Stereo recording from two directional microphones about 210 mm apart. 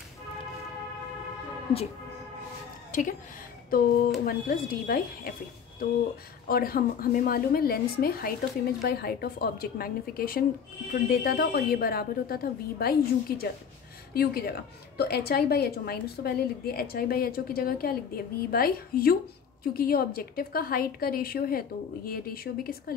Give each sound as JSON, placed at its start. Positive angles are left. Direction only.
{"t": 2.9, "sound": "a woman's voice", "side_deg": 40}
{"t": 6.4, "sound": "a woman's voice", "side_deg": 45}